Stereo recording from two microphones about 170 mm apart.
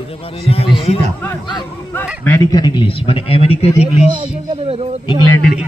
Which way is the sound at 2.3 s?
25° left (ahead or behind).